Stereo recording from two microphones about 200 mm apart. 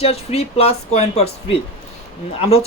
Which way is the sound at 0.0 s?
30° left (ahead or behind).